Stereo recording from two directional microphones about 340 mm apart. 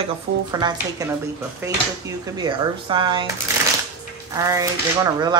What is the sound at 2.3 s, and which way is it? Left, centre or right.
Speech, centre.